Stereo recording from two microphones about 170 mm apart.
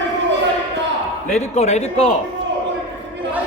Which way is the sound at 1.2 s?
40° left (ahead or behind).